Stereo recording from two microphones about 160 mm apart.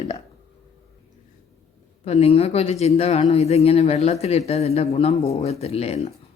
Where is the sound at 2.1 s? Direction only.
40° left (ahead or behind).